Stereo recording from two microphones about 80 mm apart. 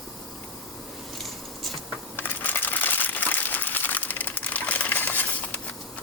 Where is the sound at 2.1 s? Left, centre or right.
Left.